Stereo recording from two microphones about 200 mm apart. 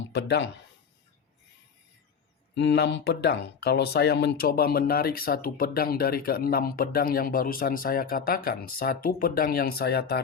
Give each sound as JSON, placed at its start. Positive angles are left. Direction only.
{"t": 0.1, "sound": "speech", "side_deg": 60}
{"t": 2.6, "sound": "speech", "side_deg": 60}